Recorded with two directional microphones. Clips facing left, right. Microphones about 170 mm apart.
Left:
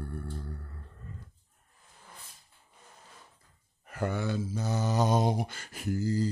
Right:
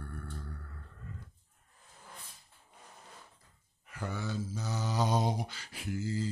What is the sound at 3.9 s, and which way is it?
Mantra, 60° left (ahead or behind).